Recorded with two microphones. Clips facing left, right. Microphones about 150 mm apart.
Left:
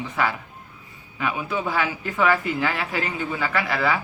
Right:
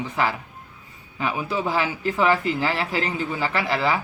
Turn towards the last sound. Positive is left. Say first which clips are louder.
# right 1 dB
turn(degrees=-25)  # may be behind; listen again after turning